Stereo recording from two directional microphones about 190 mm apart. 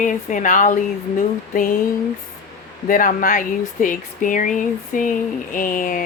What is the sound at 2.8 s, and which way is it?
Speech, 45° left (ahead or behind).